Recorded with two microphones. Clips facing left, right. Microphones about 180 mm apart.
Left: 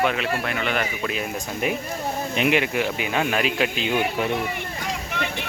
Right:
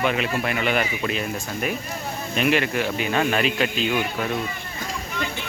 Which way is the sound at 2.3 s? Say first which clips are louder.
Right 1 dB; 15° left (ahead or behind).